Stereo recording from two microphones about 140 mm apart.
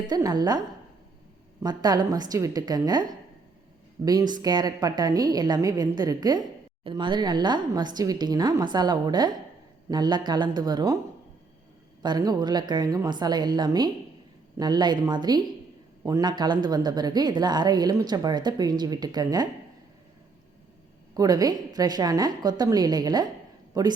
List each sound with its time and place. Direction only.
0.1 s speech: 25° right (ahead or behind)
1.6 s speech: 30° right (ahead or behind)
12.0 s a woman's voice: 30° right (ahead or behind)
21.2 s speech: 25° right (ahead or behind)